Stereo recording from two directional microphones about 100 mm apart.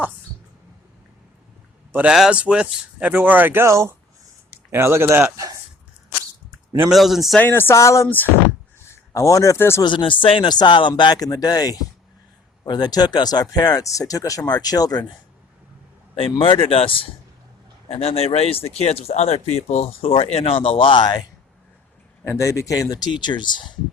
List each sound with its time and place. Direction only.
2.0 s speech: 5° right (ahead or behind); by 5.2 s 25° right (ahead or behind)
6.9 s a man's voice: centre (ahead or behind)
7.3 s speech: 20° left (ahead or behind)
9.1 s speech: 35° left (ahead or behind)
9.8 s speech: 55° left (ahead or behind); by 15.0 s 40° left (ahead or behind)
16.4 s speech: 65° left (ahead or behind)
17.8 s speech: 80° left; by 21.2 s 50° left (ahead or behind)
22.2 s speech: 30° left (ahead or behind); by 23.7 s 50° left (ahead or behind)